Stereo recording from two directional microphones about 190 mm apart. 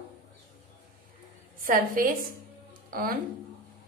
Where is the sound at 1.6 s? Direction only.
45° right (ahead or behind).